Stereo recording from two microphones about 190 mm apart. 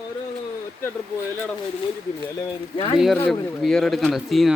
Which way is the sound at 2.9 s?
Centre (ahead or behind).